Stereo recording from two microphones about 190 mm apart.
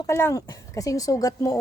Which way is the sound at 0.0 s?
15° left (ahead or behind).